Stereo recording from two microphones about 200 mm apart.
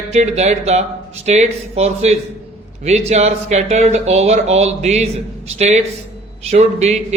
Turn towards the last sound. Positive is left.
turn(degrees=-35)  # may be behind; listen again after turning